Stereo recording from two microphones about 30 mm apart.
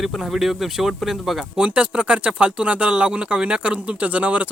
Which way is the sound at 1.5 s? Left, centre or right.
Right.